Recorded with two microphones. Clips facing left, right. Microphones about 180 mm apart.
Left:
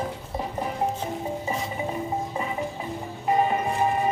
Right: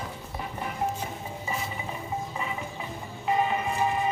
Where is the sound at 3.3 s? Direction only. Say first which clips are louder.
Left 3 dB; 40° left (ahead or behind).